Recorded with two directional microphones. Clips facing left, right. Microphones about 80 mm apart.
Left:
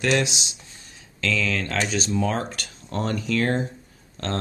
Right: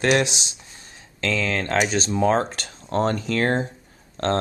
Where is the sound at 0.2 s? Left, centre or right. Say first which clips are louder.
Right 2 dB; right.